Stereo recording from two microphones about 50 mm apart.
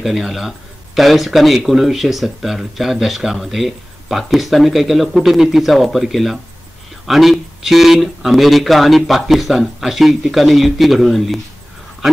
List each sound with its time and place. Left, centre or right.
0.0 s speech: centre